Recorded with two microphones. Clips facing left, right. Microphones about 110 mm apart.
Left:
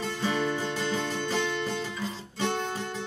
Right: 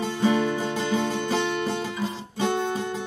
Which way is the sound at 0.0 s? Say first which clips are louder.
Right 6 dB; 15° right (ahead or behind).